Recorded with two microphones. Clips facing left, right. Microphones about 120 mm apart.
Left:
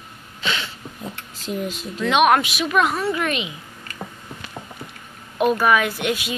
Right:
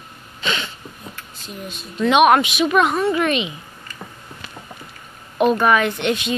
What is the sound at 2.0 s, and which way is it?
A woman's voice, 5° right (ahead or behind).